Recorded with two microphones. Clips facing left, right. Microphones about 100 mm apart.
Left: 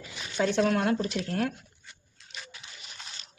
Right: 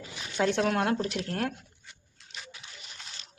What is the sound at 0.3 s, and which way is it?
Speech, 55° right (ahead or behind).